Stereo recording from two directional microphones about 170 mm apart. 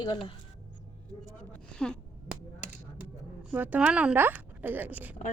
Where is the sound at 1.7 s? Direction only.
5° left (ahead or behind).